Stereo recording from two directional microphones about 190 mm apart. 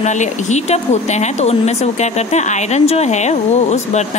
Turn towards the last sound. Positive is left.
turn(degrees=35)  # may be behind; listen again after turning